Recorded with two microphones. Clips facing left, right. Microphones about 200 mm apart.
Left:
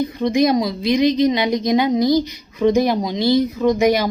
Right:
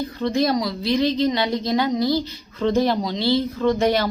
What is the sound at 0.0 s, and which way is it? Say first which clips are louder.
A woman's voice: left 4 dB; 15° left (ahead or behind).